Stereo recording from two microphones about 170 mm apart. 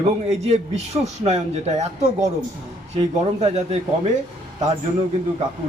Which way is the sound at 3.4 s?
40° right (ahead or behind).